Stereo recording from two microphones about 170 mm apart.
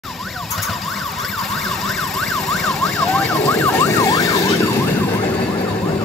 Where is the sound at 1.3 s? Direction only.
Centre (ahead or behind).